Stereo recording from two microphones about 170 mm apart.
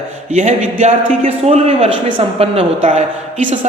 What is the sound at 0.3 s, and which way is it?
Speech, 40° right (ahead or behind).